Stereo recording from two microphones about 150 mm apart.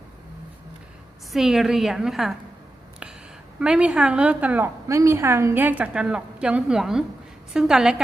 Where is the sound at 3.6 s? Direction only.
5° right (ahead or behind).